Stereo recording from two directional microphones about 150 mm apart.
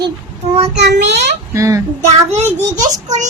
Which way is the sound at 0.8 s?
90° right.